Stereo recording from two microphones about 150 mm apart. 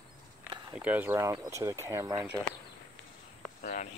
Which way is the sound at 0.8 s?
15° right (ahead or behind).